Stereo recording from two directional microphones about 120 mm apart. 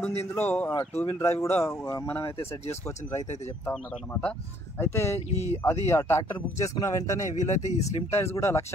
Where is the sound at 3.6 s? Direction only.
15° left (ahead or behind).